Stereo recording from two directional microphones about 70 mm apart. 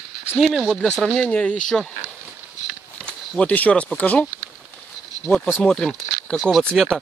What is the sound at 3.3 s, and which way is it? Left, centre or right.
Speech, left.